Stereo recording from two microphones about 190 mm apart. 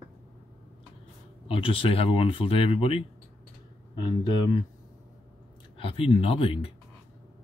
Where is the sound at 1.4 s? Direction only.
30° left (ahead or behind).